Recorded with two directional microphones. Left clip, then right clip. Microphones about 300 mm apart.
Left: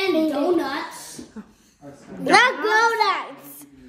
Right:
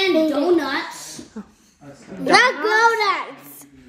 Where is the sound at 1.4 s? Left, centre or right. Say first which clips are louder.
Right 3 dB; centre.